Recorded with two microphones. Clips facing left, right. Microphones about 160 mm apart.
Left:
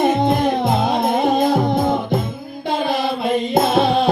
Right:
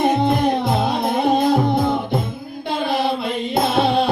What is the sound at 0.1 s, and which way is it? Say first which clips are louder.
Music: left 1 dB; 50° left (ahead or behind).